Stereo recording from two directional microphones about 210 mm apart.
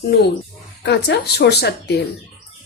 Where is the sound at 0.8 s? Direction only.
55° left (ahead or behind).